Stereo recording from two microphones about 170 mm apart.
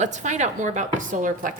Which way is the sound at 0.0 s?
45° right (ahead or behind).